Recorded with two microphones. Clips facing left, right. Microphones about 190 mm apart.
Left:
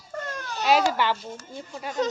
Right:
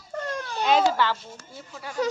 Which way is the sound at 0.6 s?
10° left (ahead or behind).